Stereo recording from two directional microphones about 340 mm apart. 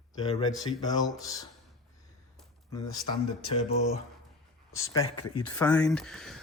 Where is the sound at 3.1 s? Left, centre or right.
Centre.